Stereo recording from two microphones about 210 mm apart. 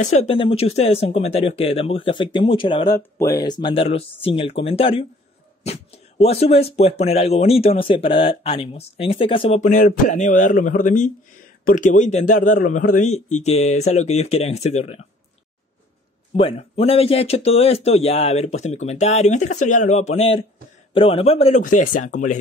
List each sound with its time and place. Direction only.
0.0 s speech: 30° left (ahead or behind)
9.6 s speech: 35° left (ahead or behind)
16.3 s speech: 30° left (ahead or behind)